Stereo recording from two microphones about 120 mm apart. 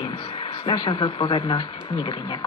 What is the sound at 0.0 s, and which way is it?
Speech, 45° left (ahead or behind).